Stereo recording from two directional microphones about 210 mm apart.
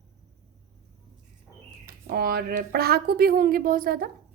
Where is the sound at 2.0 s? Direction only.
45° right (ahead or behind).